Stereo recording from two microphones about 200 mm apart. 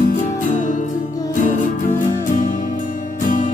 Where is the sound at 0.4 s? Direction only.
40° left (ahead or behind).